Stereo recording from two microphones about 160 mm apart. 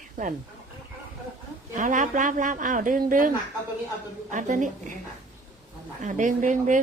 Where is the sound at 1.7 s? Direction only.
55° right (ahead or behind).